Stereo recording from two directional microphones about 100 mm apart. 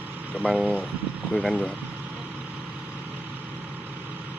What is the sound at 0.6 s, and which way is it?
Speech, 15° left (ahead or behind).